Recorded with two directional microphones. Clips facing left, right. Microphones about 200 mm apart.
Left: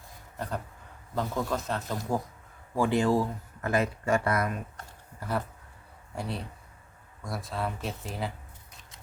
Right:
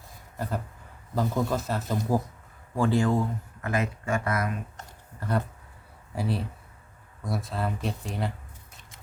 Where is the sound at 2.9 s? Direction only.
30° left (ahead or behind).